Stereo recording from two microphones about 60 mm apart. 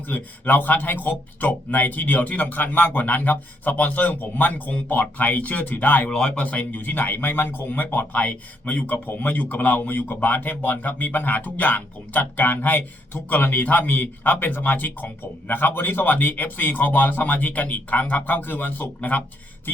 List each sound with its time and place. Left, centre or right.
0.1 s speech: left
6.1 s speech: centre